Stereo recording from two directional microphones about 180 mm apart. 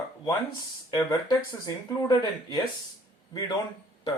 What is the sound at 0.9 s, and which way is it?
Speech, 20° left (ahead or behind).